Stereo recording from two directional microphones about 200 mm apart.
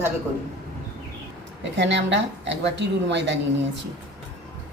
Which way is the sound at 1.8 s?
65° right (ahead or behind).